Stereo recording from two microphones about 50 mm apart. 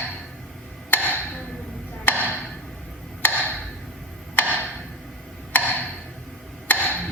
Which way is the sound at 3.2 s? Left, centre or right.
Left.